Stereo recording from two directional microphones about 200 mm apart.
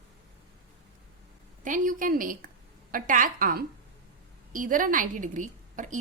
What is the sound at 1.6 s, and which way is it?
A woman's voice, 40° right (ahead or behind).